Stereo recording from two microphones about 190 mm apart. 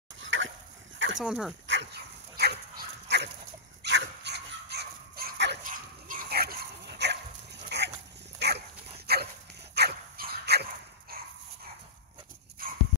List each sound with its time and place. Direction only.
0.2 s dog: 85° right
0.9 s a sound: 80° right
1.2 s speech: 5° right (ahead or behind)
1.7 s dog: 65° right (ahead or behind)
5.6 s dog: 45° right (ahead or behind)
12.6 s dog: 50° right (ahead or behind)